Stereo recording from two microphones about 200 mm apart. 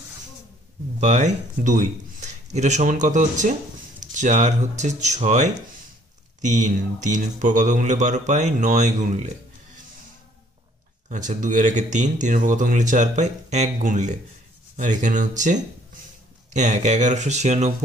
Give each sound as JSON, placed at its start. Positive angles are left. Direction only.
{"t": 0.9, "sound": "speech", "side_deg": -35}
{"t": 11.1, "sound": "speech", "side_deg": -40}